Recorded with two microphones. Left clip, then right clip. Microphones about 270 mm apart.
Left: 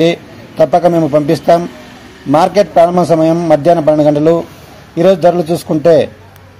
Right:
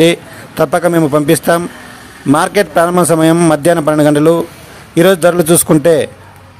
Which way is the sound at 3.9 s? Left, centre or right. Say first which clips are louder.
Even; right.